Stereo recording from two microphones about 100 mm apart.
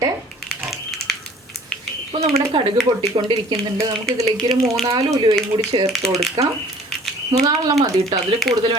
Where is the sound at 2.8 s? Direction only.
45° right (ahead or behind).